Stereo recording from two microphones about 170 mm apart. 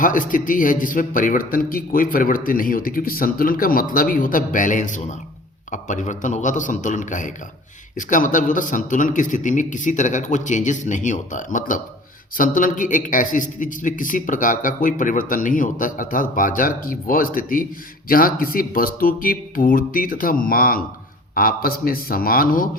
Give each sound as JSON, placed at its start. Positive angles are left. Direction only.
{"t": 0.0, "sound": "a man's voice", "side_deg": 50}